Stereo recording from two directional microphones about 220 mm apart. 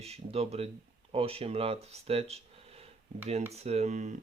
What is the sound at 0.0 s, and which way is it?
Speech, 30° right (ahead or behind).